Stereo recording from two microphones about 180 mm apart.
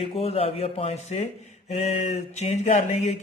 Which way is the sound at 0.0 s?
35° left (ahead or behind).